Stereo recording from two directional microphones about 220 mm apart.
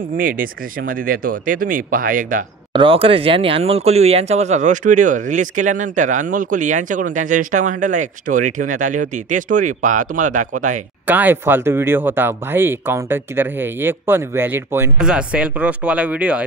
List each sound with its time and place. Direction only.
0.4 s speech: 40° right (ahead or behind)
2.7 s speech: 25° right (ahead or behind)
11.1 s speech: 10° right (ahead or behind)